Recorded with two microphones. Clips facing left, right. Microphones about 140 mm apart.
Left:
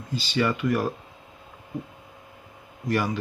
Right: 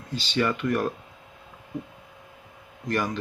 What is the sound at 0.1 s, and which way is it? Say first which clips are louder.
Speech: left 1 dB; centre (ahead or behind).